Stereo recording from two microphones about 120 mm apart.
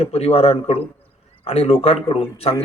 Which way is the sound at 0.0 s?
55° left (ahead or behind).